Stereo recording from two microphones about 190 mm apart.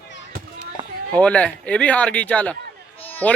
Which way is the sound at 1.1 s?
5° left (ahead or behind).